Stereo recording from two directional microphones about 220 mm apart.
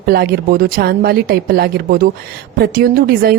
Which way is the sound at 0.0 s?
45° right (ahead or behind).